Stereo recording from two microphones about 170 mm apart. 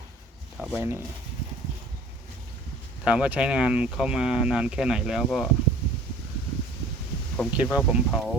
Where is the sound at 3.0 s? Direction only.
5° right (ahead or behind).